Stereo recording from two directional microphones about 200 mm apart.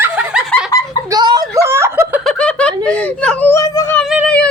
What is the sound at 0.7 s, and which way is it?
Giggle, 15° left (ahead or behind).